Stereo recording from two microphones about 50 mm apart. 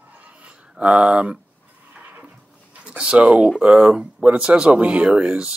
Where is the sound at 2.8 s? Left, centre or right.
Right.